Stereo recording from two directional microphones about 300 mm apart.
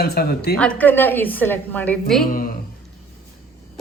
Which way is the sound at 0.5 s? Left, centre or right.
Centre.